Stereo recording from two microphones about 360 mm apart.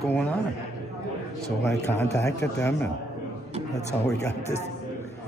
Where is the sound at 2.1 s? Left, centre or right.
Centre.